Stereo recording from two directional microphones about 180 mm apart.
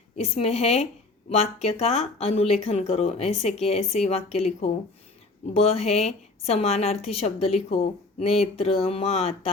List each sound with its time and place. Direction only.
0.2 s a woman's voice: 35° left (ahead or behind)